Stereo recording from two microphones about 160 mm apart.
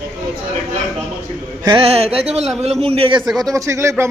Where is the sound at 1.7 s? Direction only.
35° right (ahead or behind).